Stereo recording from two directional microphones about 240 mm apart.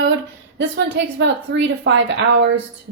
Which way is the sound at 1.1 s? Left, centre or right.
Right.